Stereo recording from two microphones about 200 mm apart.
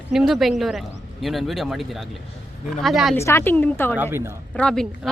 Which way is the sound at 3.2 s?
15° left (ahead or behind).